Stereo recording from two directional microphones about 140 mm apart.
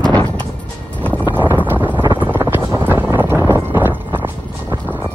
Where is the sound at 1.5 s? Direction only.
15° right (ahead or behind).